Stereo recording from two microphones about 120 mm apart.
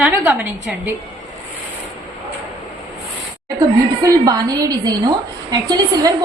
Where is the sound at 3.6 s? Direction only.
35° right (ahead or behind).